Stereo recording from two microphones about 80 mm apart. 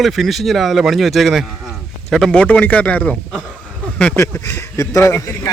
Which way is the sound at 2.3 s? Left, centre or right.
Centre.